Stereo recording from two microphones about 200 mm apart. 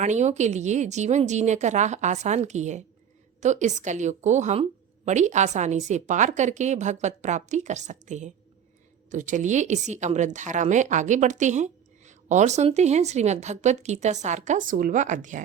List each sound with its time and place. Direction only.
0.0 s a woman's voice: 35° right (ahead or behind)